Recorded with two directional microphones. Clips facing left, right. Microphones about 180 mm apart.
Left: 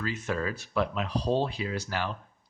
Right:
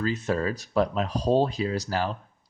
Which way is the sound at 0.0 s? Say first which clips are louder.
Right 5 dB; 35° right (ahead or behind).